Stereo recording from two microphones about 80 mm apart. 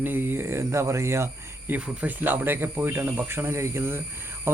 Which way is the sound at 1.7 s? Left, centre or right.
Right.